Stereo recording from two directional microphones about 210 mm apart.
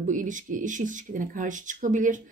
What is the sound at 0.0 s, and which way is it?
A woman's voice, 40° right (ahead or behind).